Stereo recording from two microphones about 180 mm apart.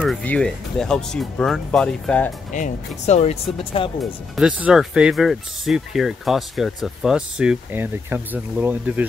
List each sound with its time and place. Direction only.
0.0 s speech: 5° left (ahead or behind)
2.5 s speech: 40° left (ahead or behind)
4.0 s speech: 5° right (ahead or behind)